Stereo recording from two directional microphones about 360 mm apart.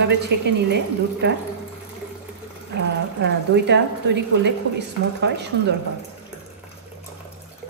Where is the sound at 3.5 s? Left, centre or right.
Right.